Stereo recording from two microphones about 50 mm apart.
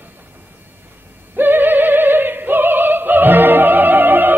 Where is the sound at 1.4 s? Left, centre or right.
Right.